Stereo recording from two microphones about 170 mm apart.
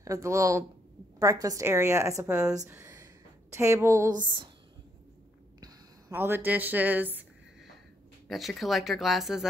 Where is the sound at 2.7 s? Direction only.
20° right (ahead or behind).